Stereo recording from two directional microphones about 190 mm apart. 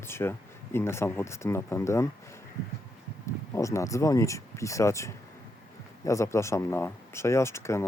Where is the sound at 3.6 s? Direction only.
15° left (ahead or behind).